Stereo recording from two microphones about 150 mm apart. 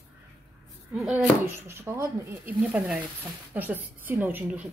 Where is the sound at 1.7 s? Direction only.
20° right (ahead or behind).